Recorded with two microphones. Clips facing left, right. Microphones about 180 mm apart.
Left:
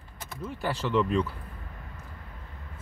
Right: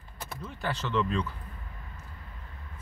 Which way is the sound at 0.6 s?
10° left (ahead or behind).